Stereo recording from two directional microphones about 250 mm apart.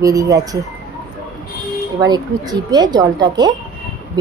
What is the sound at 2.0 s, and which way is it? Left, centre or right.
Speech, centre.